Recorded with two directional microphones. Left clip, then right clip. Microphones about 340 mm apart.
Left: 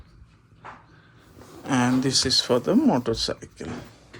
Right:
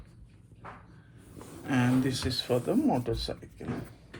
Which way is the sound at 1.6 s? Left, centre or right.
Centre.